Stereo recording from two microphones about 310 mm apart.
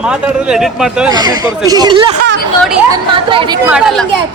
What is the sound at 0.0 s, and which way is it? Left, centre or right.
A man's voice, centre.